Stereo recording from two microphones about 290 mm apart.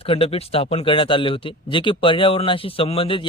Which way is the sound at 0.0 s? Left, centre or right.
Centre.